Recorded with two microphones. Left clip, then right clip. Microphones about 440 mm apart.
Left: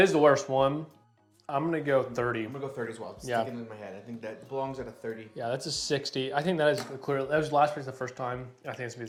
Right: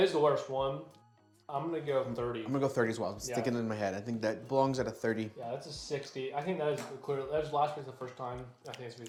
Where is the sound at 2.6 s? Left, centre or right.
Right.